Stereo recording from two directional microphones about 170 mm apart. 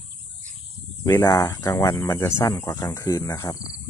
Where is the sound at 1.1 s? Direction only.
15° left (ahead or behind).